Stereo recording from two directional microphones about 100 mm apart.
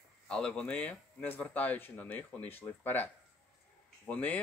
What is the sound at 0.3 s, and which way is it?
Speech, 10° left (ahead or behind).